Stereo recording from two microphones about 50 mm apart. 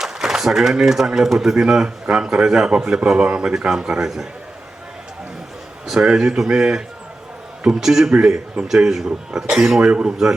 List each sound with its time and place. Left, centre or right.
0.0 s speech: centre
6.1 s speech: centre
9.8 s speech: right